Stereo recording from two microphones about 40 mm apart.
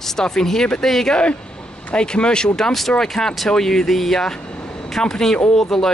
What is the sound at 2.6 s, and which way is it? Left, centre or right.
Speech, centre.